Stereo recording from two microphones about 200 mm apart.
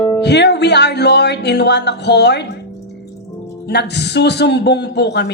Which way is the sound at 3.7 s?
55° left (ahead or behind).